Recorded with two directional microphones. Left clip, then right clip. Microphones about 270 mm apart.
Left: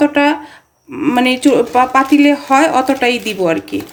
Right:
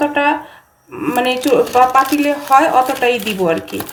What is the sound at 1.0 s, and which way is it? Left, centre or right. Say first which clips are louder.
A woman's voice: left 3 dB; left.